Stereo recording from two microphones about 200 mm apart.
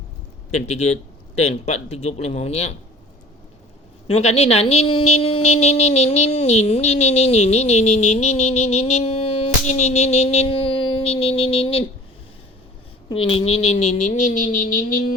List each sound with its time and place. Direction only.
0.5 s speech: 35° left (ahead or behind)
4.0 s speech: 30° left (ahead or behind)
11.0 s music: 30° left (ahead or behind)
13.1 s speech: 25° left (ahead or behind); by 14.9 s 45° left (ahead or behind)